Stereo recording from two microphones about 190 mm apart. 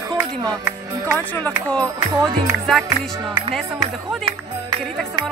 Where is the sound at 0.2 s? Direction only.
10° right (ahead or behind).